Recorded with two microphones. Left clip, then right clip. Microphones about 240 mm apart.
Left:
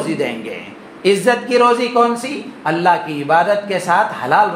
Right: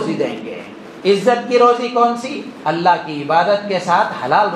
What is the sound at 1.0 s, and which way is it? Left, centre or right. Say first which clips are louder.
A man's voice: even; left.